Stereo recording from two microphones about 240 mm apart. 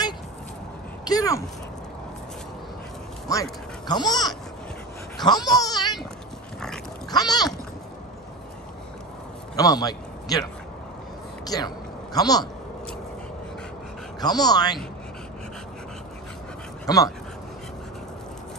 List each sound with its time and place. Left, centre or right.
1.0 s speech: centre
3.3 s speech: centre
7.1 s a sound: centre
9.6 s a man's voice: centre
14.2 s speech: centre
16.8 s speech: centre